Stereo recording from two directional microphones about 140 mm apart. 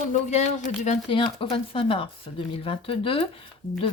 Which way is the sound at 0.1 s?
55° left (ahead or behind).